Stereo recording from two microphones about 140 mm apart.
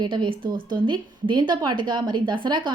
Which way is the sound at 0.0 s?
35° right (ahead or behind).